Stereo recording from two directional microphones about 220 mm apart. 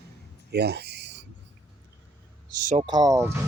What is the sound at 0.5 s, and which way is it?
Speech, 50° right (ahead or behind).